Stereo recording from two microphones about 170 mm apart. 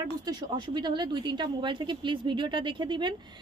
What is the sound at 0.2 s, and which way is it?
A woman's voice, 25° right (ahead or behind).